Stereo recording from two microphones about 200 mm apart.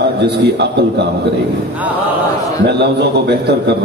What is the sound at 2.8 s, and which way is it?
A man's voice, 55° right (ahead or behind).